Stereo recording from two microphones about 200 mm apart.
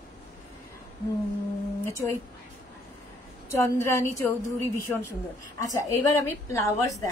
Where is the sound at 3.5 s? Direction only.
15° left (ahead or behind).